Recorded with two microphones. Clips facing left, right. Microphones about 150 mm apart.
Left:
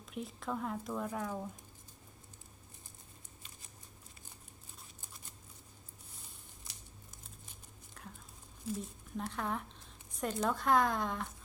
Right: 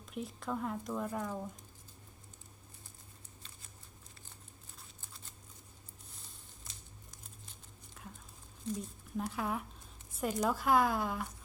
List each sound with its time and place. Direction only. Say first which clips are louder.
0.0 s speech: even; centre (ahead or behind)
8.0 s a sound: even; centre (ahead or behind)
8.7 s speech: right 1 dB; centre (ahead or behind)